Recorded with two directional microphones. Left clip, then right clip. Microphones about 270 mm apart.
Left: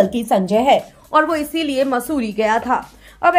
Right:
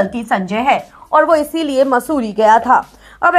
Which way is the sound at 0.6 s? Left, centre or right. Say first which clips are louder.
Left 1 dB; centre.